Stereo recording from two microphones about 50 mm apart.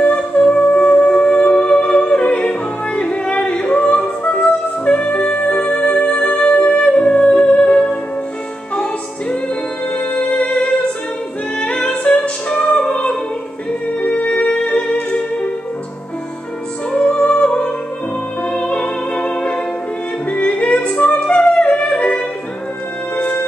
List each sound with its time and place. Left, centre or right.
0.0 s music: left
16.9 s music: centre
18.7 s music: left